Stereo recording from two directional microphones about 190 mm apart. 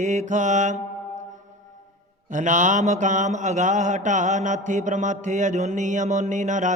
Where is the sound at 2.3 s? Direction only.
40° right (ahead or behind).